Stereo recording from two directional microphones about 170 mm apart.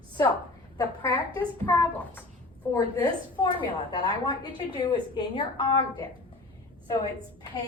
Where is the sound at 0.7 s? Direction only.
25° left (ahead or behind).